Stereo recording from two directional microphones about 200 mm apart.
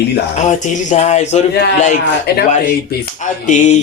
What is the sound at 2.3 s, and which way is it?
Speech, 55° left (ahead or behind).